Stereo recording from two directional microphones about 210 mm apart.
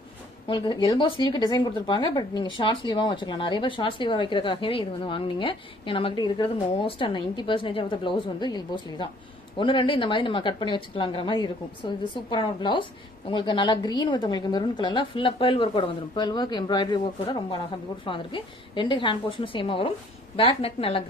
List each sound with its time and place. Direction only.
0.5 s speech: 20° left (ahead or behind)